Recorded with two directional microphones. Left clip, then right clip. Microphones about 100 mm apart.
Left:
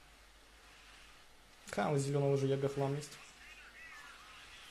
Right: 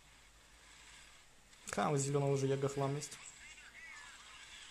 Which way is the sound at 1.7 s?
40° right (ahead or behind).